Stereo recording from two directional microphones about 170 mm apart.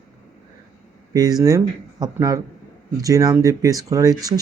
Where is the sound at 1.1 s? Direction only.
20° right (ahead or behind).